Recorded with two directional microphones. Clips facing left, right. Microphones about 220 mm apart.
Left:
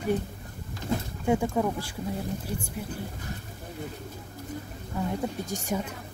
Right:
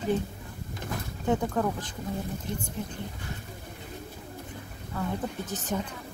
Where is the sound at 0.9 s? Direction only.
25° left (ahead or behind).